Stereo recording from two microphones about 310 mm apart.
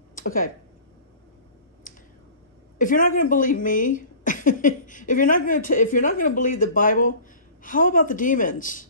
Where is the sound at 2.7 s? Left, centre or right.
Left.